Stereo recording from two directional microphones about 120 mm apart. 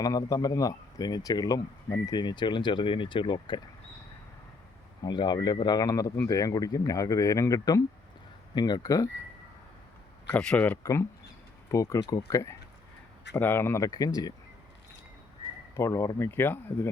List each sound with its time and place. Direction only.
0.0 s a man's voice: 30° left (ahead or behind)
5.0 s a man's voice: 35° left (ahead or behind)
10.3 s speech: 10° left (ahead or behind)
11.7 s speech: 25° left (ahead or behind)
15.7 s speech: 25° left (ahead or behind)